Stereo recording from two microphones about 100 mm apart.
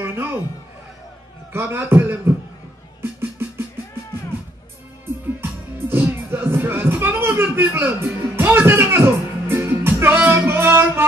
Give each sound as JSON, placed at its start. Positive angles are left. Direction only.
{"t": 0.0, "sound": "a sound", "side_deg": -20}
{"t": 1.5, "sound": "a man's voice", "side_deg": -25}
{"t": 3.0, "sound": "music", "side_deg": -25}
{"t": 5.4, "sound": "music", "side_deg": -20}